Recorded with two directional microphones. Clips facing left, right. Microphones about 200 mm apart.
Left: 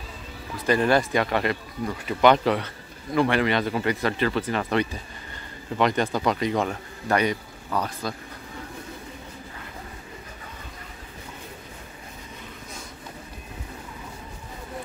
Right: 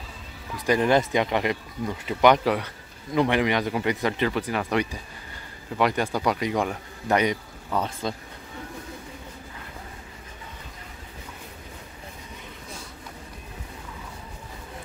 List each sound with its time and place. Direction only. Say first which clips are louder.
0.7 s speech: even; 15° right (ahead or behind)